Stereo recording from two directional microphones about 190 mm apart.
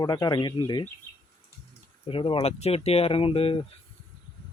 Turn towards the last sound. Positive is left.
turn(degrees=30)  # may be behind; listen again after turning